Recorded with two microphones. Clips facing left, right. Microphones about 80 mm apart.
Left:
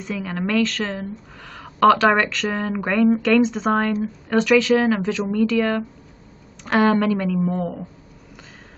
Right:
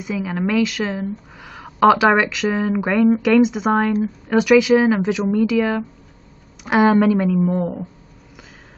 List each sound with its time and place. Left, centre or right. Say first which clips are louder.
0.0 s a woman's voice: right 3 dB; centre